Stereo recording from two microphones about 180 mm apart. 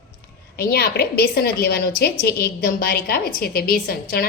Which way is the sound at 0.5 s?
60° left (ahead or behind).